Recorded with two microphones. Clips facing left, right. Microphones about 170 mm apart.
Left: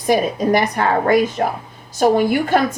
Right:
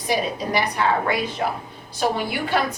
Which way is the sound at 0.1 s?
50° left (ahead or behind).